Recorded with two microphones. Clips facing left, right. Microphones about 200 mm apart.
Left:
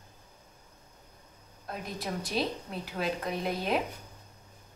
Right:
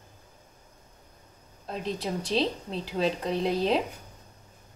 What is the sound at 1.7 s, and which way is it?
A woman's voice, 25° right (ahead or behind).